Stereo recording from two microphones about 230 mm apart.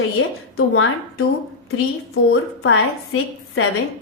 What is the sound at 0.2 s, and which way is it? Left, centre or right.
Speech, left.